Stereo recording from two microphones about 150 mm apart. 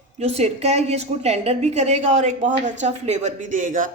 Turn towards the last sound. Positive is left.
turn(degrees=-60)  # may be behind; listen again after turning